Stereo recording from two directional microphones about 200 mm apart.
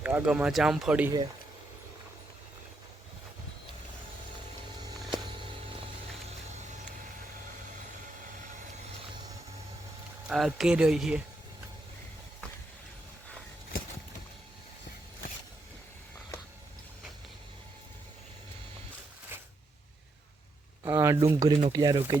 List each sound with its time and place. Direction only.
0.0 s speech: 10° right (ahead or behind)
10.2 s speech: centre (ahead or behind)
19.3 s a sound: 10° right (ahead or behind)
20.8 s speech: 15° right (ahead or behind)